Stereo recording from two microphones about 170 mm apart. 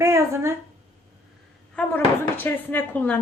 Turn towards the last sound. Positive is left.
turn(degrees=10)  # may be behind; listen again after turning